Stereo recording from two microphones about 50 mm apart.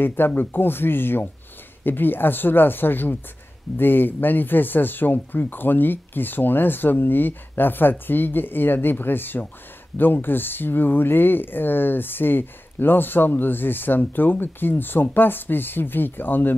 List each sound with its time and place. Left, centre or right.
0.0 s speech: left